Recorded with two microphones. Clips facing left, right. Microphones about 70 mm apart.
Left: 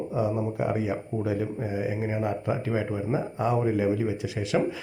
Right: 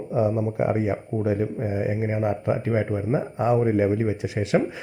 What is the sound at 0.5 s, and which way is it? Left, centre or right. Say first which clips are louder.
Speech: right 4 dB; right.